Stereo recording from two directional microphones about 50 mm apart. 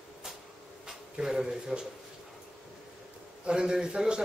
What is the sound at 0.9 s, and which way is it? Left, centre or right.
Speech, centre.